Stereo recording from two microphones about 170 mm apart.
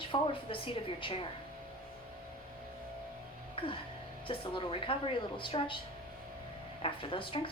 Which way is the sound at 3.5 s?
30° left (ahead or behind).